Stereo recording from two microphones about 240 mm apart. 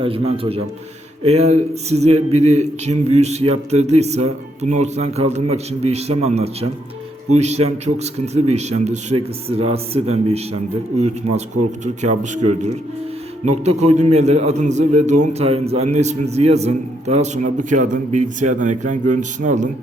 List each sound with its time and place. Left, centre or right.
0.0 s a man's voice: right